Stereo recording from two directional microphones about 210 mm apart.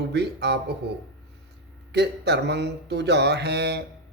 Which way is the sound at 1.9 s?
50° right (ahead or behind).